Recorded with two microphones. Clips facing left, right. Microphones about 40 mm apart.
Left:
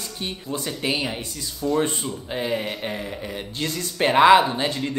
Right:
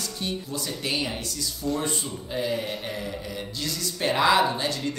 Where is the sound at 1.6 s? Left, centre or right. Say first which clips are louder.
Left 6 dB; left.